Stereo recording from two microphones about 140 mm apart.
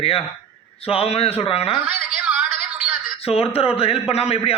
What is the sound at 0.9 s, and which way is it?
Speech, 45° left (ahead or behind).